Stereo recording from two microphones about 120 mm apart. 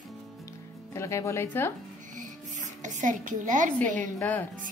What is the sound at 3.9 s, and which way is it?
Speech, 15° left (ahead or behind).